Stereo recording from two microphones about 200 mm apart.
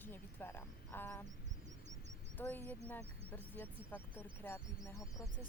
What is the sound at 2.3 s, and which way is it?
Speech, 10° left (ahead or behind).